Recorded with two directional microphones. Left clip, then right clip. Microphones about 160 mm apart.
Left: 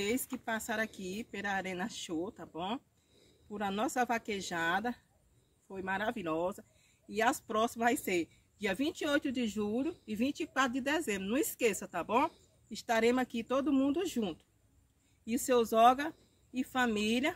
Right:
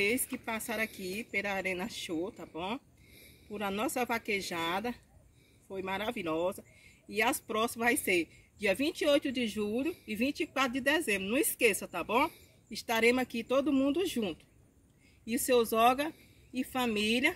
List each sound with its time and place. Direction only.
0.9 s speech: 20° left (ahead or behind)
4.6 s speech: centre (ahead or behind)
5.8 s speech: 15° left (ahead or behind)
7.8 s speech: centre (ahead or behind)
8.1 s speech: 15° left (ahead or behind)